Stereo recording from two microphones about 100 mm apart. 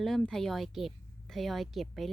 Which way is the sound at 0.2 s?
5° left (ahead or behind).